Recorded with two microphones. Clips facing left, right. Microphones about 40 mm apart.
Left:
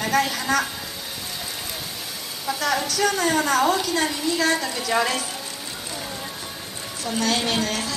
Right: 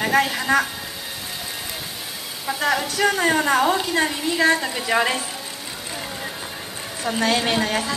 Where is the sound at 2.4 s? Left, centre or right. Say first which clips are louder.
Right 2 dB; centre.